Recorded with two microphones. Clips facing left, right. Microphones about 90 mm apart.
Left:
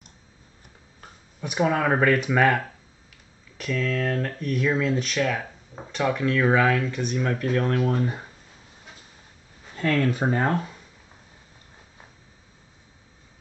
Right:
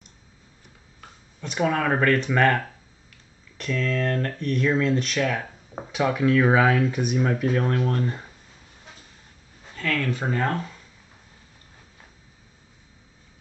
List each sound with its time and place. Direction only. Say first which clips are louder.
1.4 s speech: left 1 dB; 10° left (ahead or behind)
9.8 s speech: left 4 dB; 25° left (ahead or behind)